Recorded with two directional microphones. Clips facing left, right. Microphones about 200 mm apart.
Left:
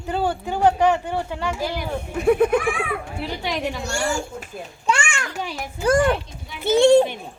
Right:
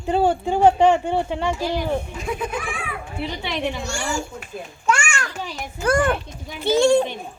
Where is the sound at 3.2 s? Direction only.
5° left (ahead or behind).